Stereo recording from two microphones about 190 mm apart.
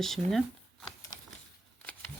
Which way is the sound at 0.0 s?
Centre (ahead or behind).